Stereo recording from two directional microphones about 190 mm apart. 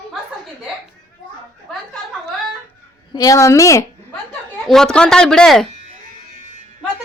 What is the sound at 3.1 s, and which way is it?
Speech, 20° left (ahead or behind).